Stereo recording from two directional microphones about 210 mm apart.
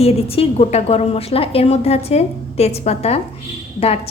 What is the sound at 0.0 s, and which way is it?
Speech, 30° left (ahead or behind).